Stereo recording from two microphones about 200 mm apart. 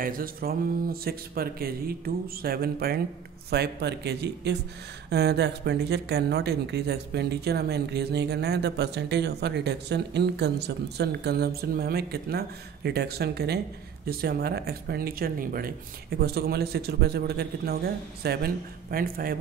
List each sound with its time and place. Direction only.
0.0 s speech: 45° right (ahead or behind)